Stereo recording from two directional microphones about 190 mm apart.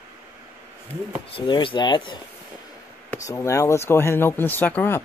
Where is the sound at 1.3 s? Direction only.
25° left (ahead or behind); by 5.0 s 10° left (ahead or behind).